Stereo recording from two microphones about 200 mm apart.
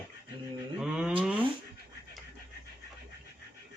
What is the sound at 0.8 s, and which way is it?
Cattle, 5° right (ahead or behind).